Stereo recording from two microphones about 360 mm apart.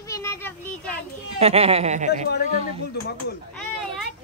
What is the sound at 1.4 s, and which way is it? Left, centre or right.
Speech, centre.